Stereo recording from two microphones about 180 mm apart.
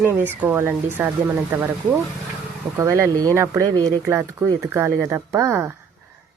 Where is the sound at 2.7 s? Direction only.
15° right (ahead or behind).